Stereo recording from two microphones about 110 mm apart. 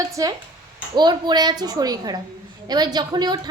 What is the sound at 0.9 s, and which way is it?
A woman's voice, 40° right (ahead or behind).